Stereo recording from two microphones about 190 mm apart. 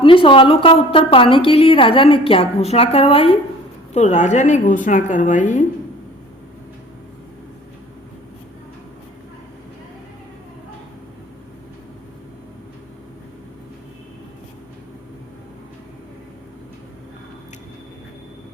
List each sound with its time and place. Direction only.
0.0 s a woman's voice: 25° left (ahead or behind)